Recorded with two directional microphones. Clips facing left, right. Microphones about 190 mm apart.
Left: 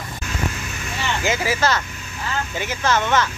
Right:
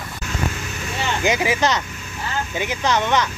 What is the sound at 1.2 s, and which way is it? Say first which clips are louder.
Speech: right 2 dB; 15° right (ahead or behind).